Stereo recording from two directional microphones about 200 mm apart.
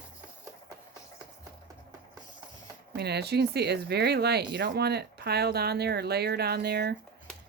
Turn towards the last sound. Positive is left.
turn(degrees=-55)  # may be behind; listen again after turning